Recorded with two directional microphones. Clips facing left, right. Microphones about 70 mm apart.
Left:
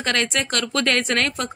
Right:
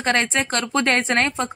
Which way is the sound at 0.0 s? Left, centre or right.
Right.